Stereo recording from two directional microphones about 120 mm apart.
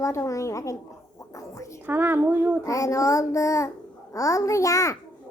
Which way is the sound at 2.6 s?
25° left (ahead or behind).